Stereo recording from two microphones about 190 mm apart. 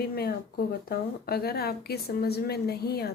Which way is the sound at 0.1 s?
50° left (ahead or behind).